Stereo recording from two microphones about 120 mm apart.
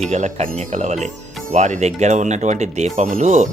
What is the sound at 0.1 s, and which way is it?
Speech, 75° right (ahead or behind).